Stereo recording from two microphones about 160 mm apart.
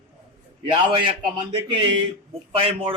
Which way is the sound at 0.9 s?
30° right (ahead or behind).